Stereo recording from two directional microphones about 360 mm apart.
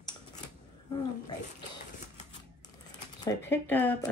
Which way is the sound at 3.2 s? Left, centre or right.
Centre.